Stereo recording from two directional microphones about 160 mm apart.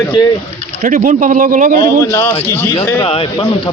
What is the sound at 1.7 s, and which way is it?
Speech, 20° left (ahead or behind).